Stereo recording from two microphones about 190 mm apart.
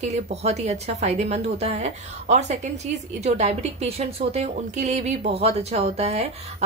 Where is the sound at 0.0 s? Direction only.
35° right (ahead or behind).